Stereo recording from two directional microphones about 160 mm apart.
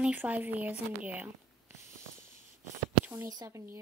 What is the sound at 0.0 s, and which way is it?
Speech, 10° right (ahead or behind).